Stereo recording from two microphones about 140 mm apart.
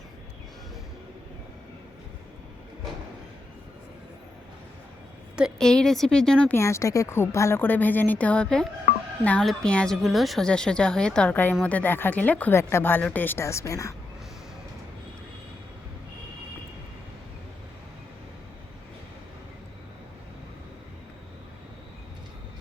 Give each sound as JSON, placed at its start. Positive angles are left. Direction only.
{"t": 5.4, "sound": "a woman's voice", "side_deg": 5}
{"t": 6.6, "sound": "a woman's voice", "side_deg": 20}